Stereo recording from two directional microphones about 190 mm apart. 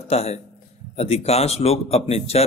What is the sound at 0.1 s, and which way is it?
A man's voice, 35° left (ahead or behind).